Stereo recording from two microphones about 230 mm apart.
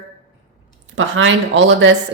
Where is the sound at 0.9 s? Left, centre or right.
Right.